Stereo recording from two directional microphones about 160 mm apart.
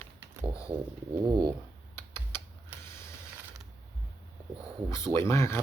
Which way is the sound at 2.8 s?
15° left (ahead or behind).